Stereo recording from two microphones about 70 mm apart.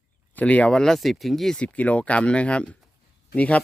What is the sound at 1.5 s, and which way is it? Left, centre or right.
Speech, centre.